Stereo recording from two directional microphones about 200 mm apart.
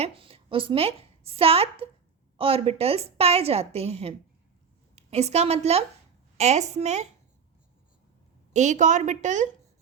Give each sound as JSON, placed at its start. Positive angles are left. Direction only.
{"t": 0.0, "sound": "a woman's voice", "side_deg": -30}
{"t": 8.5, "sound": "a woman's voice", "side_deg": -35}